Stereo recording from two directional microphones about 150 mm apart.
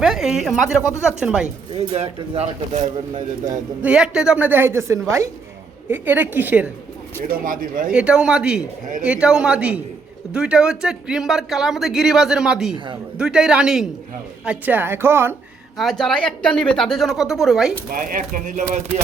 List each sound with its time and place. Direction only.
0.0 s speech: 5° right (ahead or behind)
0.8 s speech: 20° left (ahead or behind)
1.0 s speech: 5° right (ahead or behind)
1.9 s speech: 40° right (ahead or behind)
3.8 s a woman's voice: 5° right (ahead or behind)
7.3 s speech: 70° right (ahead or behind)
7.9 s speech: 5° right (ahead or behind)
15.8 s speech: centre (ahead or behind)
18.1 s speech: 65° right (ahead or behind)